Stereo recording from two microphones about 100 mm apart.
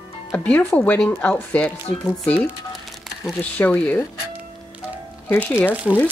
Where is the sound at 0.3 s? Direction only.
20° left (ahead or behind).